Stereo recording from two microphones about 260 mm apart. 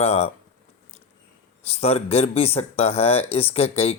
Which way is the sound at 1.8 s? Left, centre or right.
Left.